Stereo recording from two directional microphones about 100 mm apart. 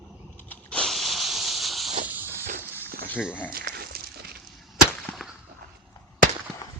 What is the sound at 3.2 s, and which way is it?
Speech, 10° right (ahead or behind).